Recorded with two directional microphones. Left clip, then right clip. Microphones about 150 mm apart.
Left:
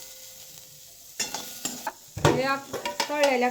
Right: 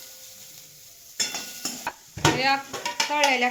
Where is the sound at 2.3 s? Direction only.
70° left (ahead or behind).